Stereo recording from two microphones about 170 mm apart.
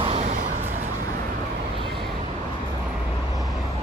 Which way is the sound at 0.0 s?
40° right (ahead or behind).